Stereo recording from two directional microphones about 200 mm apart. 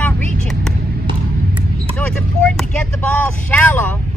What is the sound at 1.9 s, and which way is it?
Speech, 5° left (ahead or behind).